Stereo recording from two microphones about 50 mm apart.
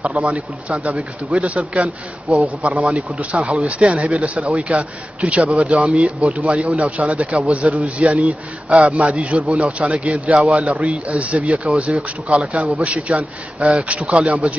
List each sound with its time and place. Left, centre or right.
0.1 s speech: right